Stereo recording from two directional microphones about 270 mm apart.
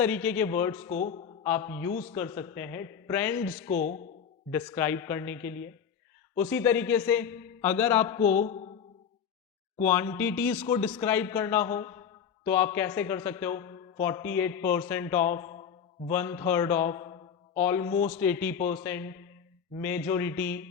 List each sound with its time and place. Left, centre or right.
0.0 s a man's voice: centre
0.9 s speech: left
1.5 s a man's voice: centre
3.7 s speech: left
4.5 s a man's voice: centre
9.8 s a man's voice: centre